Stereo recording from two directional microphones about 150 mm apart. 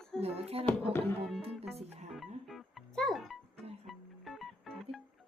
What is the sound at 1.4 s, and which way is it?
Music, 40° right (ahead or behind).